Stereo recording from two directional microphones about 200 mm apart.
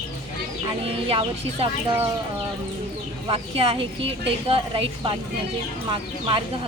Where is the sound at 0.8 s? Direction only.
30° right (ahead or behind).